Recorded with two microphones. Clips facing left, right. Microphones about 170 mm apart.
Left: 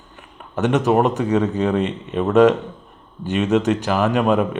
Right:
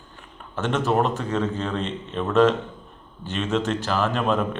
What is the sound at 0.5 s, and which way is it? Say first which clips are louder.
Speech: left 5 dB; 15° left (ahead or behind).